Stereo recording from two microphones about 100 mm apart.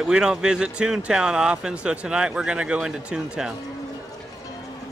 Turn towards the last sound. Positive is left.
turn(degrees=-5)  # may be behind; listen again after turning